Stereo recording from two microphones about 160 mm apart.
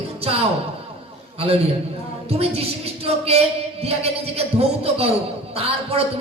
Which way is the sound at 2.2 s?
40° right (ahead or behind).